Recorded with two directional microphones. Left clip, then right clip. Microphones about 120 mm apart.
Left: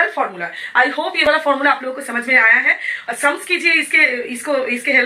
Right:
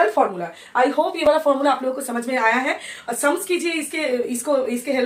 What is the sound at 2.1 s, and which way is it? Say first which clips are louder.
Speech: left 9 dB; 35° right (ahead or behind).